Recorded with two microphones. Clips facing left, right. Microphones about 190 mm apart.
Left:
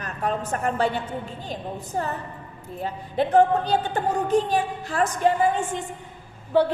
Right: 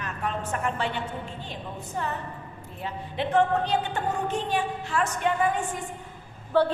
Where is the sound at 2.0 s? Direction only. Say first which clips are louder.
Left 2 dB; 40° left (ahead or behind).